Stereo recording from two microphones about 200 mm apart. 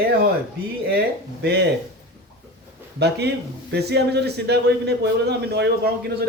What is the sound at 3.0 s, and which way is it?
A man's voice, 55° right (ahead or behind).